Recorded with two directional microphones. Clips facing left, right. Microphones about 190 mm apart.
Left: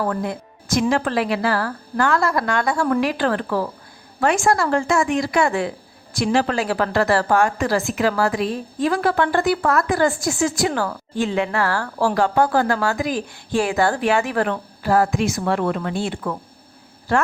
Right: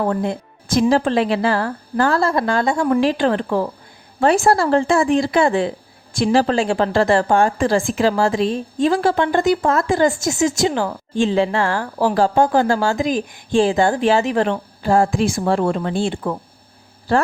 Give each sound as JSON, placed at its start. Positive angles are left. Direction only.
{"t": 0.0, "sound": "a woman's voice", "side_deg": -25}
{"t": 4.4, "sound": "a woman's voice", "side_deg": -30}
{"t": 12.1, "sound": "a woman's voice", "side_deg": -30}